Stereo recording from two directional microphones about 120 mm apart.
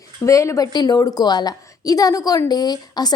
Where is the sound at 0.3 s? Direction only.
25° left (ahead or behind).